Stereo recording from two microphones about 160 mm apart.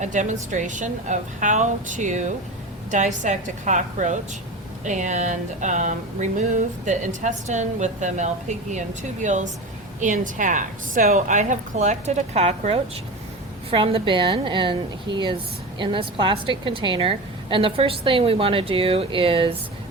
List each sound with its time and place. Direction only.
0.0 s a woman's voice: 50° right (ahead or behind); by 19.5 s 35° right (ahead or behind)